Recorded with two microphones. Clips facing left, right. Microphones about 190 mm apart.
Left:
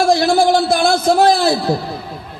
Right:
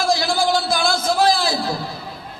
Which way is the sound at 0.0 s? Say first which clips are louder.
Left 7 dB; 60° left (ahead or behind).